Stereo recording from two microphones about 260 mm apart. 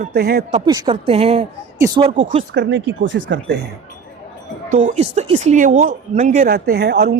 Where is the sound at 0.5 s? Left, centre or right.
Centre.